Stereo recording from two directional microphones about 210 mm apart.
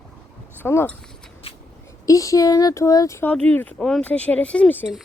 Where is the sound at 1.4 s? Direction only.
25° left (ahead or behind).